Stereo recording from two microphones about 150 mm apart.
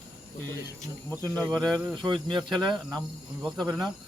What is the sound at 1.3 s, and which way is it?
Speech, 5° left (ahead or behind).